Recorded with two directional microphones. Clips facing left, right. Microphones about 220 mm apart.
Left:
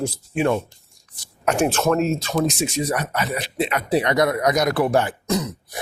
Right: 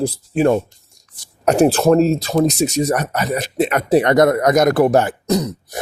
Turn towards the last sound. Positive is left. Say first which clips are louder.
# right 5 dB
turn(degrees=-35)  # may be behind; listen again after turning